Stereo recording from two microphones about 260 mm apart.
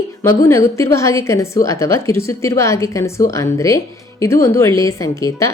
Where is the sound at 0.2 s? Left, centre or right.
Centre.